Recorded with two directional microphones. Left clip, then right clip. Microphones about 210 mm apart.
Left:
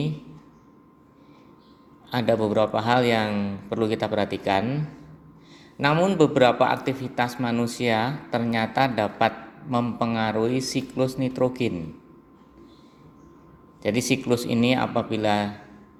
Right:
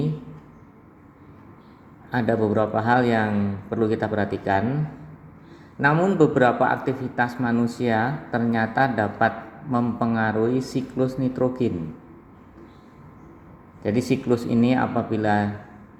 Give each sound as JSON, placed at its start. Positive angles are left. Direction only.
{"t": 2.0, "sound": "a man's voice", "side_deg": 20}
{"t": 5.8, "sound": "a man's voice", "side_deg": 15}
{"t": 13.8, "sound": "a man's voice", "side_deg": 20}